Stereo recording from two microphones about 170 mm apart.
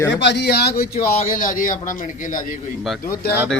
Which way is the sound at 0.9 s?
55° left (ahead or behind).